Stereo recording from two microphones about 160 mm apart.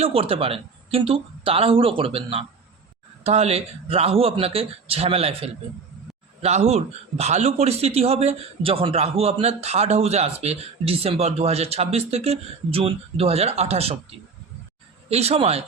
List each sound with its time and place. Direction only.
0.0 s a man's voice: 35° right (ahead or behind)
15.1 s a man's voice: 40° right (ahead or behind)